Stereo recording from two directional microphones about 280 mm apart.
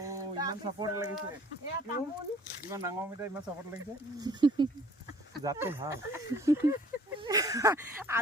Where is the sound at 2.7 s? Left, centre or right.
Centre.